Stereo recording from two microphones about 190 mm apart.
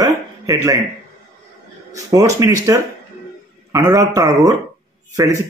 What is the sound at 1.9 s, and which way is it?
A man's voice, 15° right (ahead or behind).